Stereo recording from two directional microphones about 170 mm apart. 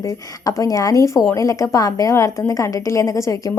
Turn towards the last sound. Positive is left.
turn(degrees=20)  # may be behind; listen again after turning